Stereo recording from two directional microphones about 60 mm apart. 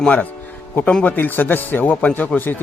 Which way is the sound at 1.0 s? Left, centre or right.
Left.